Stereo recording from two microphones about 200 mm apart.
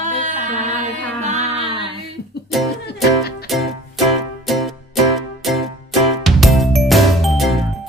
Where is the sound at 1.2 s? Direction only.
30° right (ahead or behind).